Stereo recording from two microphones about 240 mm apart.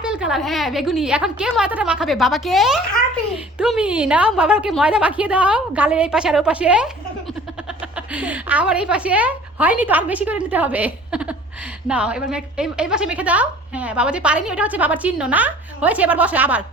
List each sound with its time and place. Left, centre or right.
0.0 s a woman's voice: centre